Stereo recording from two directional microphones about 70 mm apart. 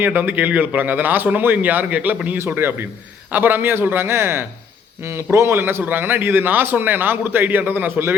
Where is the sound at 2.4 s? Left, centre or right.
Right.